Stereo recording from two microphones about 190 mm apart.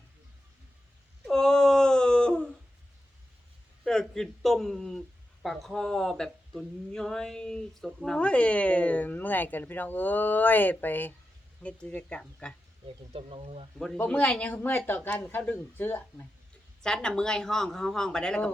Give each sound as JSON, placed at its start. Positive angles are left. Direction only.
{"t": 1.2, "sound": "a sound", "side_deg": 5}
{"t": 3.8, "sound": "a man's voice", "side_deg": 5}
{"t": 13.1, "sound": "speech", "side_deg": -30}
{"t": 13.7, "sound": "a man's voice", "side_deg": 5}